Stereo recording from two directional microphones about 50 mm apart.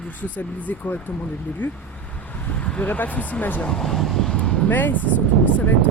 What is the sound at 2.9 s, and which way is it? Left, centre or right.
Speech, left.